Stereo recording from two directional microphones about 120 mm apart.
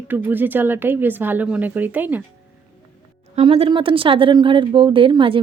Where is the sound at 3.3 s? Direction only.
55° right (ahead or behind).